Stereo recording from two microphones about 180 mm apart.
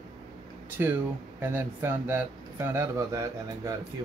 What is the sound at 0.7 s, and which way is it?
Speech, 10° right (ahead or behind).